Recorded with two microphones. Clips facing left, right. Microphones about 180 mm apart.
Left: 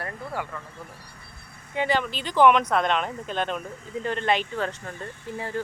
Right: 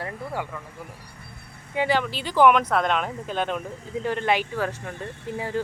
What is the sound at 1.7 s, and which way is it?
Speech, 10° right (ahead or behind).